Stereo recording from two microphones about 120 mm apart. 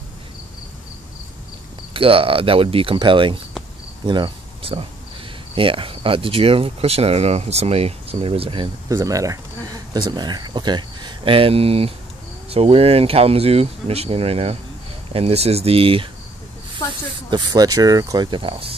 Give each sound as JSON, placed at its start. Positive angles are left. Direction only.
{"t": 2.0, "sound": "speech", "side_deg": -50}
{"t": 8.8, "sound": "speech", "side_deg": -30}
{"t": 17.3, "sound": "speech", "side_deg": -30}